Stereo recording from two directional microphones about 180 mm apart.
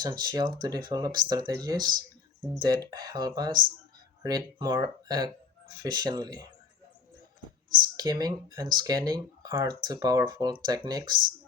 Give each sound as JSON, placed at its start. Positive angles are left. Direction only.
{"t": 0.0, "sound": "speech", "side_deg": -25}
{"t": 7.9, "sound": "speech", "side_deg": -20}